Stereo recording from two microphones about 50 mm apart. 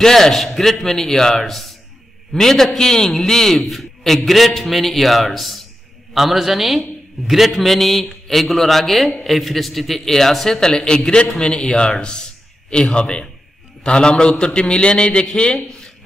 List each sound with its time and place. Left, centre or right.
0.0 s a man's voice: centre